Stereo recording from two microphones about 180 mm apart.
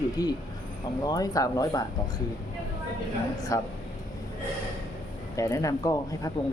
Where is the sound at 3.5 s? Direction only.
20° left (ahead or behind).